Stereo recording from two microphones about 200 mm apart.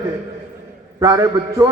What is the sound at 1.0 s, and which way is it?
Speech, 15° right (ahead or behind).